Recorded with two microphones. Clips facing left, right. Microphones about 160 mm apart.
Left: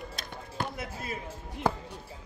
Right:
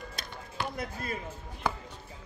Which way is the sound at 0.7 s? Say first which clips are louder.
Right 1 dB; 5° left (ahead or behind).